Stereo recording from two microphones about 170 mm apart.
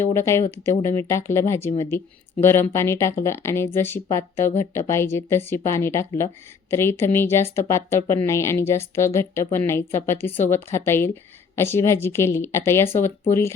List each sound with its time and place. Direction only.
0.0 s speech: 15° left (ahead or behind)